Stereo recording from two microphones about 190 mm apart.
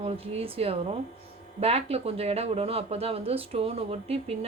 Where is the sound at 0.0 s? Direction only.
30° right (ahead or behind).